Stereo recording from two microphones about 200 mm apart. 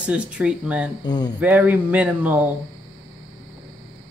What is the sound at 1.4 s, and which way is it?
Speech, 5° right (ahead or behind).